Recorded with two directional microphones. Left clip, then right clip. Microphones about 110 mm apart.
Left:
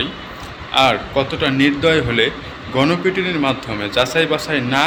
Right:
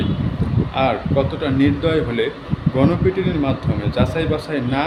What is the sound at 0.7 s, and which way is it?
A man's voice, 15° right (ahead or behind).